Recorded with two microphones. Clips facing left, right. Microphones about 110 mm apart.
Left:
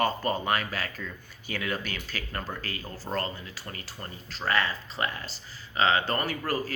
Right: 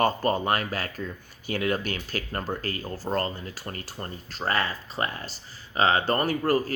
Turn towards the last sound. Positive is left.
turn(degrees=-40)  # may be behind; listen again after turning